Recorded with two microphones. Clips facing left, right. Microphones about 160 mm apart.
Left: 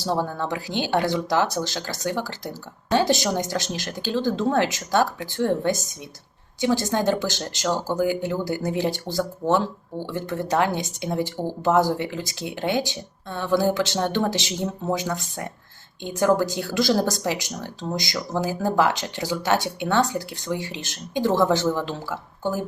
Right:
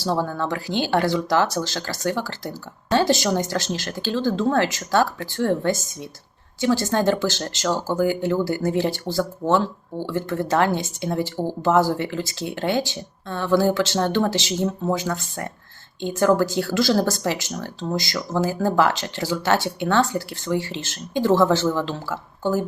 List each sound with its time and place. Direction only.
0.0 s speech: 15° left (ahead or behind)